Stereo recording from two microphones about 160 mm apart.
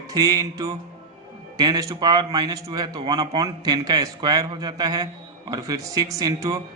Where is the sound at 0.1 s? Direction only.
25° right (ahead or behind).